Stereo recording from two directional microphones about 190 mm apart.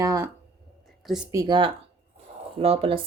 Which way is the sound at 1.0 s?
5° right (ahead or behind).